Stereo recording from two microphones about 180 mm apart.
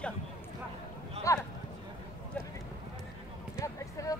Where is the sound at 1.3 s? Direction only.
15° left (ahead or behind).